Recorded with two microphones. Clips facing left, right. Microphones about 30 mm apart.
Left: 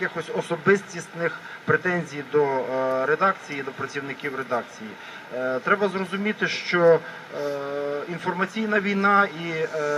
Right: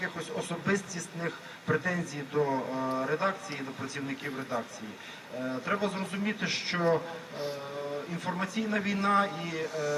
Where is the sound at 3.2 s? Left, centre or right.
Left.